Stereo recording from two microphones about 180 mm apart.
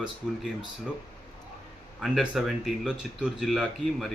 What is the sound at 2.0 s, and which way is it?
Speech, centre (ahead or behind).